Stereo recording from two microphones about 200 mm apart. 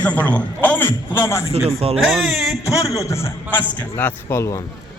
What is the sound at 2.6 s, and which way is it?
A man's voice, 15° left (ahead or behind).